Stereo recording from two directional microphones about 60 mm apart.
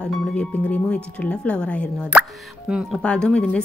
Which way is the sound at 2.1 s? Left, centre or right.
Right.